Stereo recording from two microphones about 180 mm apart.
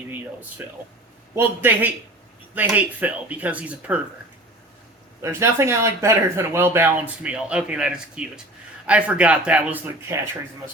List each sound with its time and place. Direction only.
0.6 s speech: 10° right (ahead or behind)
5.2 s speech: 15° right (ahead or behind)